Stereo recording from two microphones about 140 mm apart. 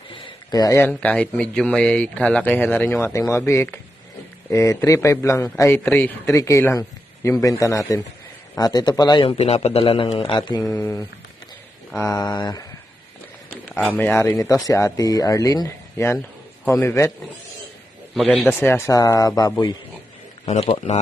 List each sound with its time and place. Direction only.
0.1 s a sound: 35° left (ahead or behind)
0.9 s speech: 10° left (ahead or behind); by 9.3 s 30° left (ahead or behind)
9.4 s a man's voice: 45° left (ahead or behind)
10.7 s speech: 20° left (ahead or behind)
13.5 s a sound: 10° left (ahead or behind)
13.9 s speech: 10° left (ahead or behind)
18.1 s speech: 5° left (ahead or behind); by 19.7 s 25° left (ahead or behind)
20.4 s a man's voice: 45° left (ahead or behind)